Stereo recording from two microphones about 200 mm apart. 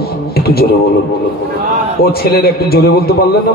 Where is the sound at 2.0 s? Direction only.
50° left (ahead or behind).